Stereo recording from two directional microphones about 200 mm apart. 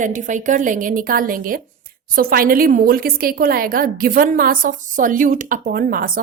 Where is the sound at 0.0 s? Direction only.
40° right (ahead or behind).